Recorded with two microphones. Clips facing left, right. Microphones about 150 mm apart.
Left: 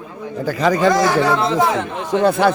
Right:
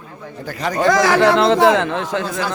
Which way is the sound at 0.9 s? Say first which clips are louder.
Right 2 dB; 90° right.